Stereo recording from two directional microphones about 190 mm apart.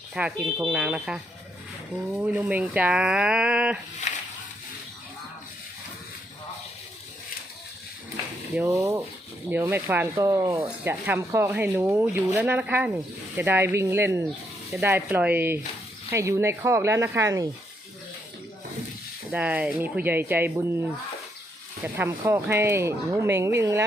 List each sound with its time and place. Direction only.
0.1 s speech: 5° right (ahead or behind)
4.0 s a sound: 35° left (ahead or behind)
8.5 s speech: 15° right (ahead or behind)
19.3 s speech: 10° right (ahead or behind)
21.9 s speech: 10° right (ahead or behind)